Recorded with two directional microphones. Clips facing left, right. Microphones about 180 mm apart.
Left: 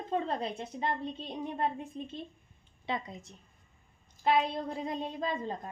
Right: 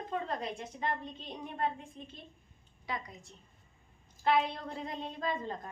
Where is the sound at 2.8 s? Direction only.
25° left (ahead or behind).